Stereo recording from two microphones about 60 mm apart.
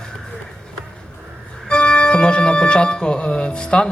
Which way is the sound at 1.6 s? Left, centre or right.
Centre.